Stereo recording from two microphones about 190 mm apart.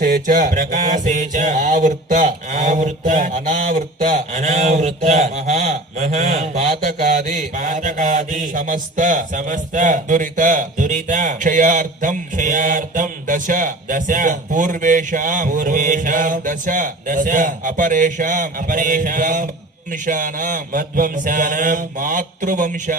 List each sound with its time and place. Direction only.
0.0 s mantra: 45° right (ahead or behind)